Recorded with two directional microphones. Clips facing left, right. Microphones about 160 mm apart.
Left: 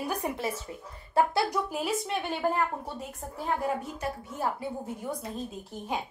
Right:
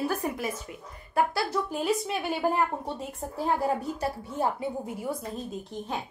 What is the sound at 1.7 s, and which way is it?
Speech, centre (ahead or behind).